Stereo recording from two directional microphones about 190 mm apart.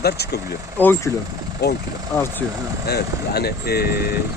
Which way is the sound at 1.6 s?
60° left (ahead or behind).